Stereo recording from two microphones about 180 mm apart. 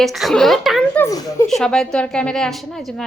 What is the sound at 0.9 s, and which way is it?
Speech, 15° left (ahead or behind).